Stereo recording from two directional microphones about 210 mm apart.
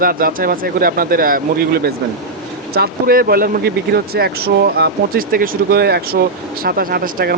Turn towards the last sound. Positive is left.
turn(degrees=-45)  # may be behind; listen again after turning